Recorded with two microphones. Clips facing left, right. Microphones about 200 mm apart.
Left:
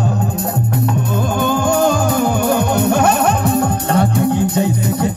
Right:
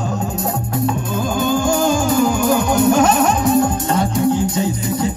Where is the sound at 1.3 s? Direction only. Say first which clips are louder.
Left 1 dB; 60° left (ahead or behind).